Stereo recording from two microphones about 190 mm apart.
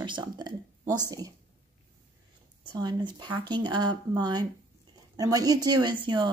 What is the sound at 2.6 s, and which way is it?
Speech, 25° right (ahead or behind).